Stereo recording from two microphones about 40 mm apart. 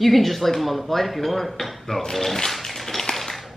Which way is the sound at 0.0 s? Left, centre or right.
Centre.